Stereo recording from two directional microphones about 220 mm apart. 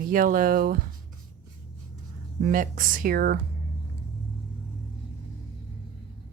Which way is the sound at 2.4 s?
40° right (ahead or behind).